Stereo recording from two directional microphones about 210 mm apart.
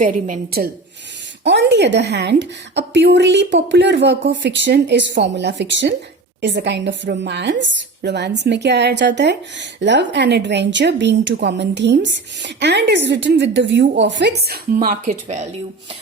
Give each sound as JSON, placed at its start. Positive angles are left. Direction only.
{"t": 0.0, "sound": "a woman's voice", "side_deg": -40}
{"t": 1.5, "sound": "a woman's voice", "side_deg": -55}